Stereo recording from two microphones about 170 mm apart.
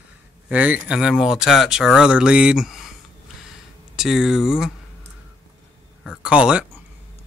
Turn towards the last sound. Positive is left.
turn(degrees=-5)  # may be behind; listen again after turning